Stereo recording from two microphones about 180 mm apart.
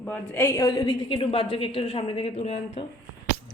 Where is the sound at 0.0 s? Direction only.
10° left (ahead or behind).